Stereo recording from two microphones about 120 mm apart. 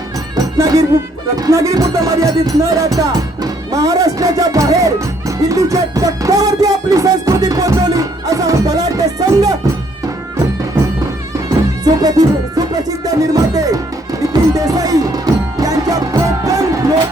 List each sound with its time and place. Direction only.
0.3 s music: 30° right (ahead or behind)
11.9 s music: 30° right (ahead or behind)